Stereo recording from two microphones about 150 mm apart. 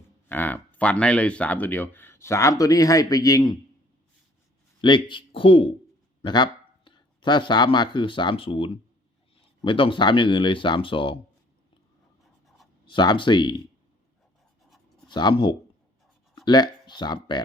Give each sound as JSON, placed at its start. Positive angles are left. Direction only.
{"t": 0.3, "sound": "speech", "side_deg": 10}
{"t": 4.8, "sound": "speech", "side_deg": 30}
{"t": 12.8, "sound": "speech", "side_deg": 30}
{"t": 15.0, "sound": "speech", "side_deg": 30}